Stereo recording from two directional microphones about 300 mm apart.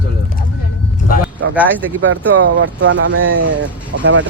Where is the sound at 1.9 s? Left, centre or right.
Right.